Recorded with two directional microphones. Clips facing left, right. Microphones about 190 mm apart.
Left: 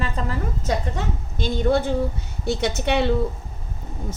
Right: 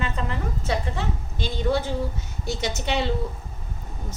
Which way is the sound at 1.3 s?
55° left (ahead or behind).